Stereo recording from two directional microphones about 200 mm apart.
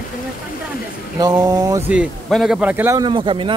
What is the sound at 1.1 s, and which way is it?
A man's voice, 20° right (ahead or behind).